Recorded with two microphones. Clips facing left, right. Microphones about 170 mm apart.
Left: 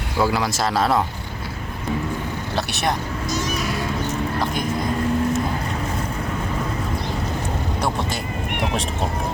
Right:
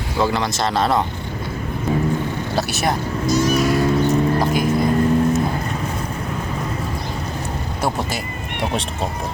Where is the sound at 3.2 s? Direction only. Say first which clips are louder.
Right 9 dB; 20° left (ahead or behind).